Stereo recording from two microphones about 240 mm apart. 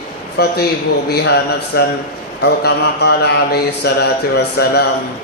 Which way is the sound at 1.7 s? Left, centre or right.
Left.